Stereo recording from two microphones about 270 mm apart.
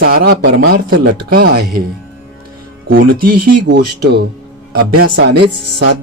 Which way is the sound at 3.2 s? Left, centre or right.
Right.